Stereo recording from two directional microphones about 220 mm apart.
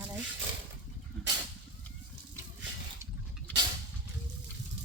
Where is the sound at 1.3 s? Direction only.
55° right (ahead or behind).